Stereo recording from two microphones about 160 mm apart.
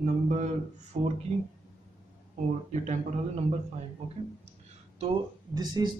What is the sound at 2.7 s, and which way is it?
Speech, 45° right (ahead or behind).